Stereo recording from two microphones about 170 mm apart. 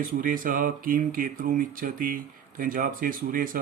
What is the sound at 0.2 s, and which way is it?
Speech, 55° right (ahead or behind).